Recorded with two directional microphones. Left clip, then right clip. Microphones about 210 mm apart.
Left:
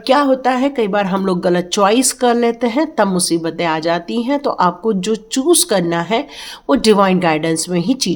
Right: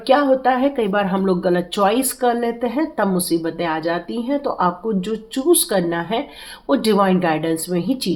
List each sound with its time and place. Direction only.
0.1 s speech: 30° left (ahead or behind)